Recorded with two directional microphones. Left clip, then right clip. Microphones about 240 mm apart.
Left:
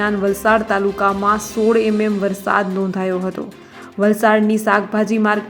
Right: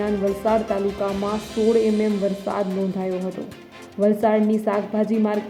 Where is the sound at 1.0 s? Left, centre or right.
Left.